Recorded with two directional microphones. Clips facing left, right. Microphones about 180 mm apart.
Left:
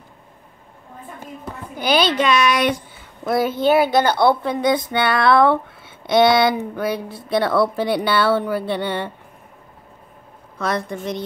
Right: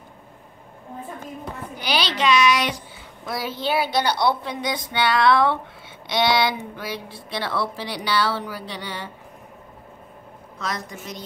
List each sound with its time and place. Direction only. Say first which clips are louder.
1.8 s a woman's voice: left 7 dB; 50° left (ahead or behind)
10.6 s a woman's voice: left 8 dB; 60° left (ahead or behind)